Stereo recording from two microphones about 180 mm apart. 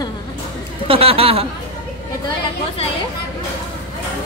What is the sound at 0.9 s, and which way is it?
Speech, 30° right (ahead or behind).